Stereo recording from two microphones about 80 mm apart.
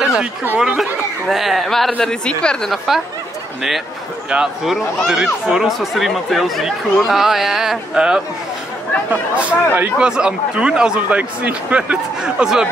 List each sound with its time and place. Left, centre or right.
0.0 s chatter: centre
0.6 s speech: centre
4.3 s speech: centre
9.1 s speech: right